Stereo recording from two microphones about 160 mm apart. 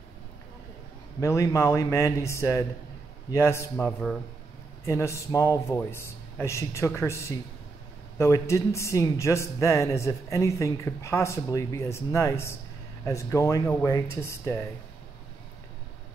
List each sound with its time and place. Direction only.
1.2 s a man's voice: 20° left (ahead or behind)